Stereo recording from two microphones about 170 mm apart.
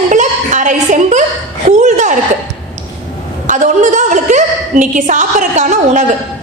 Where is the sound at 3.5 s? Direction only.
45° right (ahead or behind).